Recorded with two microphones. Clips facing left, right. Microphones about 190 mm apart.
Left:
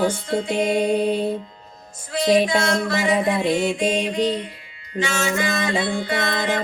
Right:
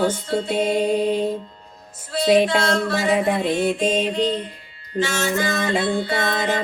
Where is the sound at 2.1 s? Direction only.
15° left (ahead or behind).